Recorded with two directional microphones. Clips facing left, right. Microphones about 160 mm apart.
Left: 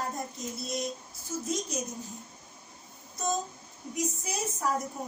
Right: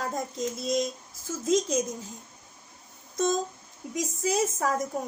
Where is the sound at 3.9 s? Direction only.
90° right.